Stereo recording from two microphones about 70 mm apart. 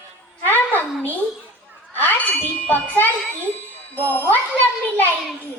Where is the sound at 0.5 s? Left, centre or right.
Left.